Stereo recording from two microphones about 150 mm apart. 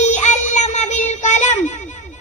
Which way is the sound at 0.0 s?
50° left (ahead or behind).